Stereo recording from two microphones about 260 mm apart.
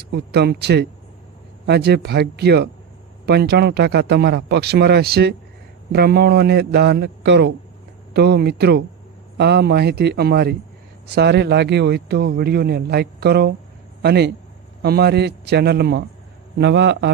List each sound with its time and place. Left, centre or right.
0.0 s a man's voice: right